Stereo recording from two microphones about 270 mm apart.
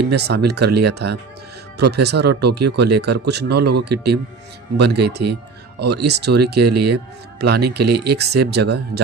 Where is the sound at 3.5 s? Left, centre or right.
Right.